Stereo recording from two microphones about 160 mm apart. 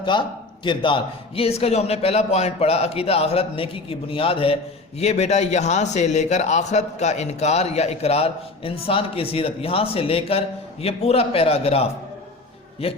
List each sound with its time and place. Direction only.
0.0 s a man's voice: 30° left (ahead or behind)